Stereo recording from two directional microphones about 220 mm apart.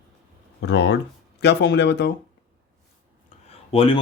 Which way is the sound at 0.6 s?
50° left (ahead or behind).